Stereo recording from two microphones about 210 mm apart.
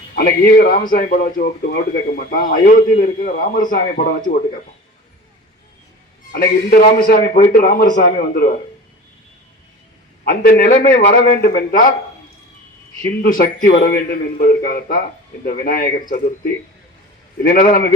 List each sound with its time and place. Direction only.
0.2 s a man's voice: 45° left (ahead or behind)
6.3 s a man's voice: 45° left (ahead or behind)
10.2 s a man's voice: 45° left (ahead or behind)
13.2 s a man's voice: 45° left (ahead or behind)